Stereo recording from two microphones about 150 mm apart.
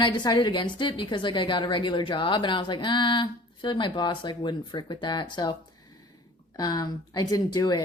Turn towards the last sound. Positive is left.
turn(degrees=25)  # may be behind; listen again after turning